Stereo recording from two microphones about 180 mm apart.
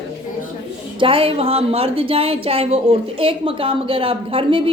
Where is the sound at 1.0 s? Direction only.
30° right (ahead or behind).